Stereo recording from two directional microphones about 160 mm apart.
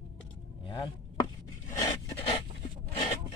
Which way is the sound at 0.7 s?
30° left (ahead or behind).